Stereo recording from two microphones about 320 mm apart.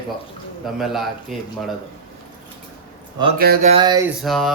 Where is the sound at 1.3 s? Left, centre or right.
Centre.